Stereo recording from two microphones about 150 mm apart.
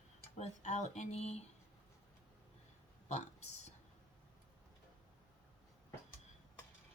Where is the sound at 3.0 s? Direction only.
50° left (ahead or behind).